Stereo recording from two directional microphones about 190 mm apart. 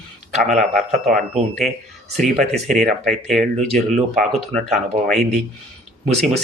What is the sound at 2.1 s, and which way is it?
Speech, centre (ahead or behind).